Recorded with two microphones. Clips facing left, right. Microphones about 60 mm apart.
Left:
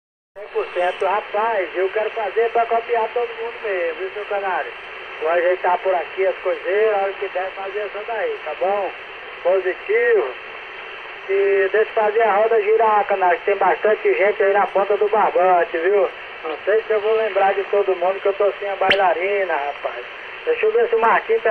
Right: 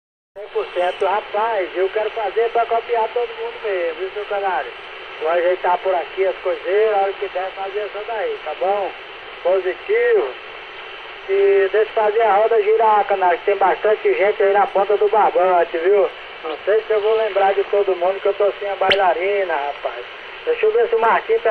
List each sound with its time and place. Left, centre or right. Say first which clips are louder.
0.6 s speech: right 1 dB; left
11.3 s speech: right 2 dB; left
15.0 s speech: right 2 dB; left
15.6 s speech: right 2 dB; left
20.6 s speech: right 1 dB; left
21.3 s speech: right 1 dB; left